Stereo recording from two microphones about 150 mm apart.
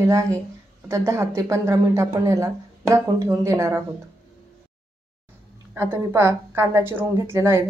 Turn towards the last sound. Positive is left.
turn(degrees=-15)  # may be behind; listen again after turning